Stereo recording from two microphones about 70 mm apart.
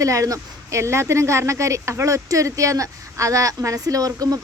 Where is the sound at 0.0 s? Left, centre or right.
Right.